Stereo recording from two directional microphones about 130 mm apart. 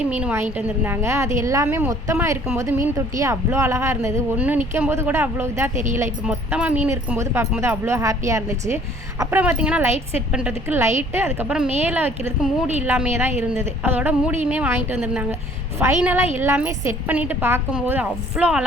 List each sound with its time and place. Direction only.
0.2 s a woman's voice: 15° right (ahead or behind)
9.4 s a woman's voice: 10° right (ahead or behind)